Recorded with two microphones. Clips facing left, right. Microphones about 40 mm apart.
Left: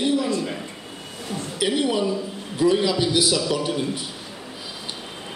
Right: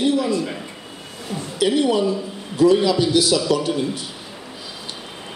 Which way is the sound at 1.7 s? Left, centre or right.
Centre.